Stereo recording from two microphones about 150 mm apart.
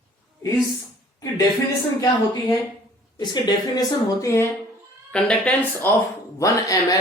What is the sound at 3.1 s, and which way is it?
Speech, 30° left (ahead or behind).